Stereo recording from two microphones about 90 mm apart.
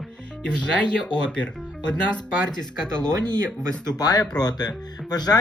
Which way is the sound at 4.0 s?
45° left (ahead or behind).